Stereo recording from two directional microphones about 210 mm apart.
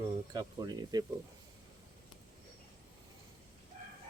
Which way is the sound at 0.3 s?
20° right (ahead or behind).